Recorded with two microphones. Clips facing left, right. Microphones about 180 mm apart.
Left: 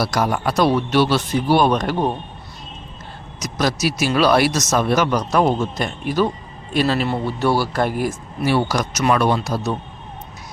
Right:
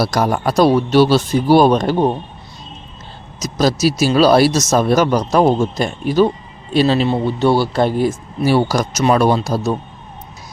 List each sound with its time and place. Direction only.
0.0 s speech: 35° right (ahead or behind)
3.4 s speech: 30° right (ahead or behind)